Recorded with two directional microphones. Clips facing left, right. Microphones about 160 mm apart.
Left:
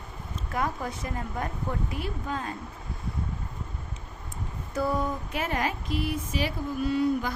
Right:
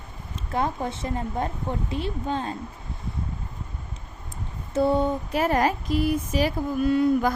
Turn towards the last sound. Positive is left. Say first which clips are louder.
# right 5 dB
turn(degrees=-50)  # may be behind; listen again after turning